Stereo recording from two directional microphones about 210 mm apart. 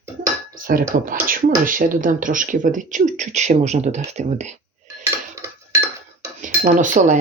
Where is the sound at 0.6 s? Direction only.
40° right (ahead or behind).